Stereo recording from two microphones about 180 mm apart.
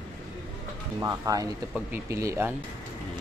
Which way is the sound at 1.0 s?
20° right (ahead or behind).